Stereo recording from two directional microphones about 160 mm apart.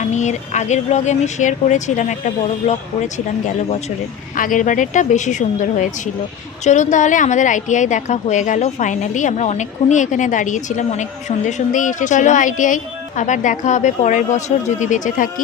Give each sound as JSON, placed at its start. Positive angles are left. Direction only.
{"t": 0.0, "sound": "a woman's voice", "side_deg": 50}
{"t": 4.4, "sound": "a woman's voice", "side_deg": 55}